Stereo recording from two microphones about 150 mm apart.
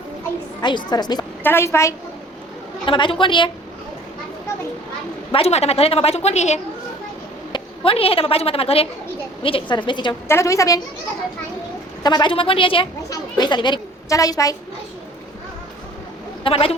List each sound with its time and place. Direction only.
0.6 s a woman's voice: 30° left (ahead or behind)
1.5 s a woman's voice: 15° left (ahead or behind)
2.8 s a woman's voice: 35° left (ahead or behind)
5.3 s a woman's voice: 45° left (ahead or behind)
10.2 s a woman's voice: 20° left (ahead or behind)
12.0 s a woman's voice: 30° left (ahead or behind)
16.4 s a woman's voice: 40° left (ahead or behind)